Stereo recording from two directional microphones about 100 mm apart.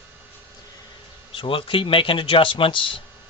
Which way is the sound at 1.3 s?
60° left (ahead or behind).